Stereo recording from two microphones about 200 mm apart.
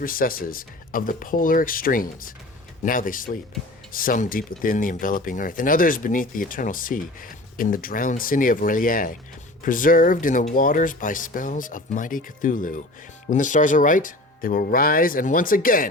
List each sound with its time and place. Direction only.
0.0 s speech: 45° left (ahead or behind)